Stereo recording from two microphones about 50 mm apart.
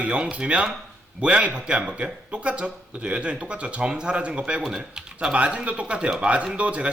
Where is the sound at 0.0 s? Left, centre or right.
Right.